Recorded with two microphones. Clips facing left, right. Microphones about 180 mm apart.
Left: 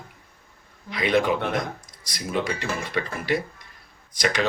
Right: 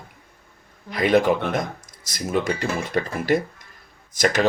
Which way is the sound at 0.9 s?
45° right (ahead or behind).